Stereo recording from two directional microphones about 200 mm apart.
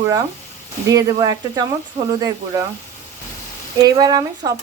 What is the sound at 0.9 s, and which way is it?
Speech, 15° right (ahead or behind).